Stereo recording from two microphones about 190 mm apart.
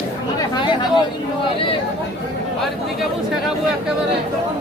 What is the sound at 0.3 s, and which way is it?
Chatter, 25° left (ahead or behind).